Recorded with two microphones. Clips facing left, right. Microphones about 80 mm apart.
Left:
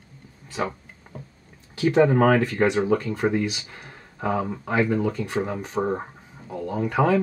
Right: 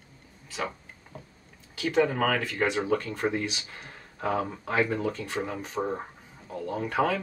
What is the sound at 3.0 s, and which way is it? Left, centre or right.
Speech, centre.